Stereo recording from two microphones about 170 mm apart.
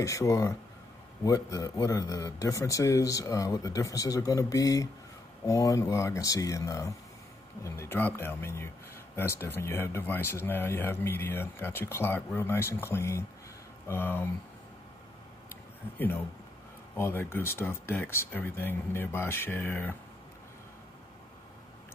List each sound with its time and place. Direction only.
0.0 s a man's voice: 20° left (ahead or behind)
16.9 s speech: 10° left (ahead or behind)